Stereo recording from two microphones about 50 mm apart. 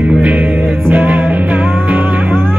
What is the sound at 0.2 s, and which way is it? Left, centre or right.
Music, right.